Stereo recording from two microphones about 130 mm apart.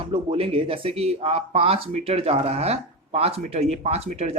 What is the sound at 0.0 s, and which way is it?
Speech, 45° right (ahead or behind).